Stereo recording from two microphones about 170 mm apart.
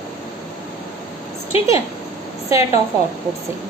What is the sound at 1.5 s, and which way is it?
Speech, 35° left (ahead or behind).